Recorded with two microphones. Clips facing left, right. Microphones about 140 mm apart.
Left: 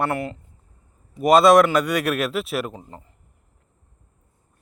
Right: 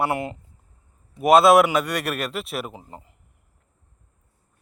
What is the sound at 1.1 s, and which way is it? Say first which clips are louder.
A man's voice: left 1 dB; centre (ahead or behind).